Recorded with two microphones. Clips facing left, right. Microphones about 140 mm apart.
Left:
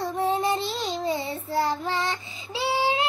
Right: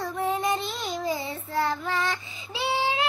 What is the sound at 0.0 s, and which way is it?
Child singing, 30° left (ahead or behind).